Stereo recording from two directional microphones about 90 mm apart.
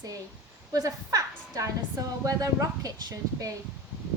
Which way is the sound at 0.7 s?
40° right (ahead or behind).